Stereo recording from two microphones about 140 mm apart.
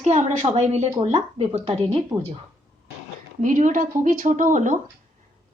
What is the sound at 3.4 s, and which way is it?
Speech, 70° right (ahead or behind).